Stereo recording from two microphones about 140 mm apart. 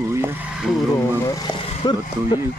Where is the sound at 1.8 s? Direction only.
30° left (ahead or behind).